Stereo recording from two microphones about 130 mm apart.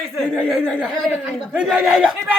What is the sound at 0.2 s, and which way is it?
Speech, 5° right (ahead or behind).